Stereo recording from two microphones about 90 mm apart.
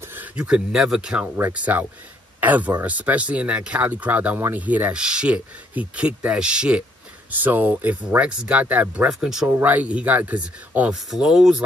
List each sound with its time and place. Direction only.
0.1 s speech: 15° right (ahead or behind)
9.5 s speech: 20° right (ahead or behind)